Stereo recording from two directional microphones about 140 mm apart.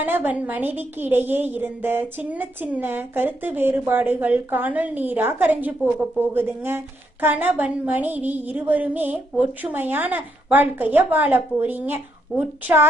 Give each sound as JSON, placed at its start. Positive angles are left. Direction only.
{"t": 0.0, "sound": "a woman's voice", "side_deg": -15}